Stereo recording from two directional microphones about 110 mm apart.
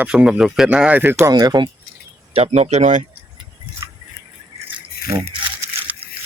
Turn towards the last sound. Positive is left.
turn(degrees=-15)  # may be behind; listen again after turning